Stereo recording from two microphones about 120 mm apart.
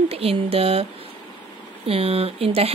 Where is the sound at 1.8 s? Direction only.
55° right (ahead or behind).